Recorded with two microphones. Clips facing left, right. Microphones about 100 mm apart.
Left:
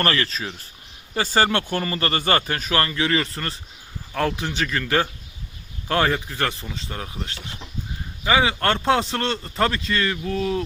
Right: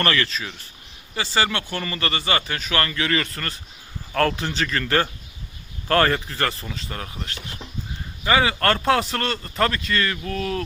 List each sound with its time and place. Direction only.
0.0 s speech: 30° left (ahead or behind)
2.7 s a man's voice: 25° left (ahead or behind)
4.1 s a man's voice: 10° left (ahead or behind)